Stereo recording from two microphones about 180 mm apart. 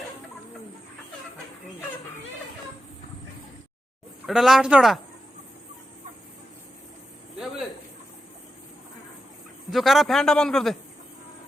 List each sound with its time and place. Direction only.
4.3 s a man's voice: centre (ahead or behind)
9.7 s a man's voice: centre (ahead or behind)